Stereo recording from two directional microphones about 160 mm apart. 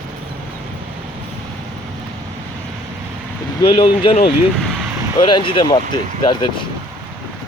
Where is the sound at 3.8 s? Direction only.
35° left (ahead or behind).